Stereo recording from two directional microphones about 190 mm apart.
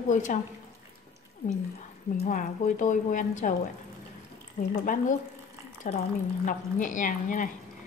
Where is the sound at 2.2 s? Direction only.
45° left (ahead or behind).